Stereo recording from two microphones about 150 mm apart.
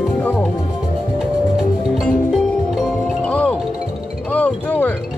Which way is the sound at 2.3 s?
Centre (ahead or behind).